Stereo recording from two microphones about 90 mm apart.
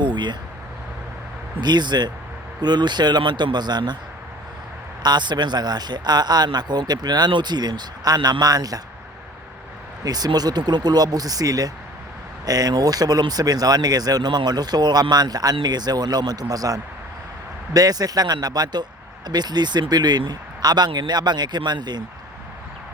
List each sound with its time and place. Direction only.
0.0 s a sound: 60° right (ahead or behind)
1.6 s a man's voice: 55° right (ahead or behind)
5.0 s a man's voice: 55° right (ahead or behind)
10.0 s a man's voice: 45° right (ahead or behind)